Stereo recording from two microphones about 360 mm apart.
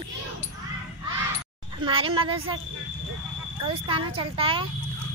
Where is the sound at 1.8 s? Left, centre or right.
Centre.